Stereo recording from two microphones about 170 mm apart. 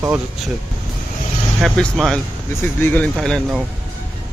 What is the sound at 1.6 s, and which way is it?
Speech, centre (ahead or behind).